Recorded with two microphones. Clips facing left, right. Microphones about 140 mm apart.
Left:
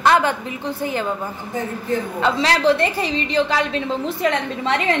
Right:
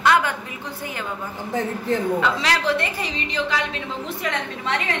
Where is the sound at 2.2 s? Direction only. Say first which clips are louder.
Left 4 dB; 30° left (ahead or behind).